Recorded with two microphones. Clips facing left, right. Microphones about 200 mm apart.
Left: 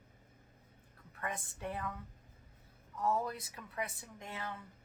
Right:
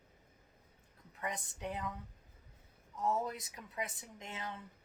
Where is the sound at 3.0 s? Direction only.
20° right (ahead or behind).